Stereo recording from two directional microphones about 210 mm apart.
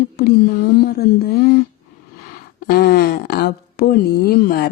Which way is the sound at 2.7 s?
50° left (ahead or behind).